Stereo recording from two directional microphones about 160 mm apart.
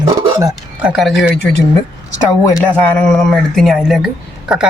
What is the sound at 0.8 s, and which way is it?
Speech, 5° right (ahead or behind).